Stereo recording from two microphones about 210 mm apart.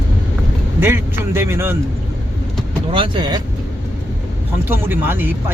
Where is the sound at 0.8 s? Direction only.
10° right (ahead or behind).